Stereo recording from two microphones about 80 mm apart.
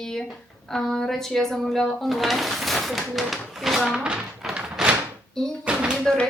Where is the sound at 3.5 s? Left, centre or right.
Centre.